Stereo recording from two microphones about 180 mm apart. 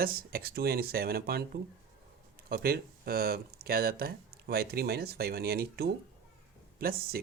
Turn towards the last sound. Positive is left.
turn(degrees=-55)  # may be behind; listen again after turning